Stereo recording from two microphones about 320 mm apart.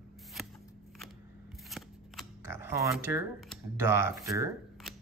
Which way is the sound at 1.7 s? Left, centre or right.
Centre.